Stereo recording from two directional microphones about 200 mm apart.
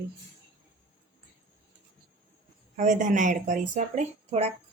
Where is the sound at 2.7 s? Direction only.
40° right (ahead or behind).